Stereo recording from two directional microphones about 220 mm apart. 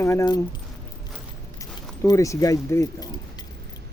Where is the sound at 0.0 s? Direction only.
15° left (ahead or behind).